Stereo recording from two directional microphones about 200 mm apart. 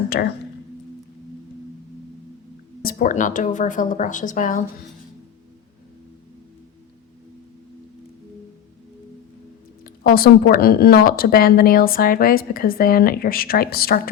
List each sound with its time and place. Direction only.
0.1 s speech: 50° left (ahead or behind)
2.8 s speech: 40° left (ahead or behind)
9.8 s speech: 50° left (ahead or behind)